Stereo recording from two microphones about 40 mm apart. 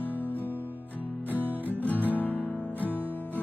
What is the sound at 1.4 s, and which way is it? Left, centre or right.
Music, right.